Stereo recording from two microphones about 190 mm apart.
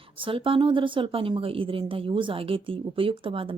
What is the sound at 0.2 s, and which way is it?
Speech, 30° right (ahead or behind).